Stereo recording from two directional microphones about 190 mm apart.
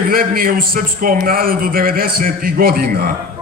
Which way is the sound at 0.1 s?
50° right (ahead or behind).